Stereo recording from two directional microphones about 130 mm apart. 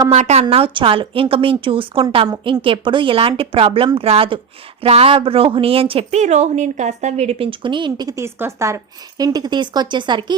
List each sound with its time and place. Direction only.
0.1 s a woman's voice: 60° right (ahead or behind)
0.5 s a woman's voice: 45° right (ahead or behind)